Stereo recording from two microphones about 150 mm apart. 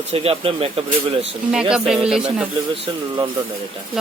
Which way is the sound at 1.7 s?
5° right (ahead or behind).